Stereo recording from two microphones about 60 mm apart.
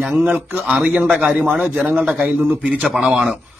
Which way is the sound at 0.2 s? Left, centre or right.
Right.